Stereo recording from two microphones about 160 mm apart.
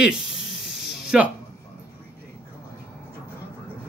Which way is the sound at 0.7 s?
5° right (ahead or behind).